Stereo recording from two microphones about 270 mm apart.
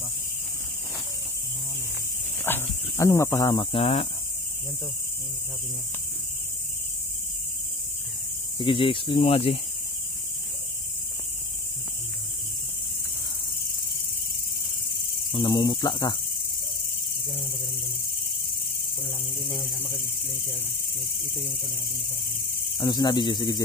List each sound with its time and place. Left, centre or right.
2.4 s speech: centre
8.5 s speech: centre
15.3 s cricket: centre
19.4 s speech: centre
22.8 s cricket: centre